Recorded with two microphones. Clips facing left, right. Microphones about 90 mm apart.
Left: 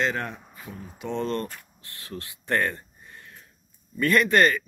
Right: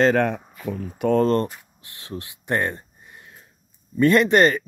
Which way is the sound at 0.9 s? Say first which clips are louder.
Right 10 dB; 50° right (ahead or behind).